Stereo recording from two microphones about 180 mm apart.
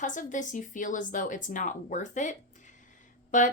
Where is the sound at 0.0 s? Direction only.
45° left (ahead or behind).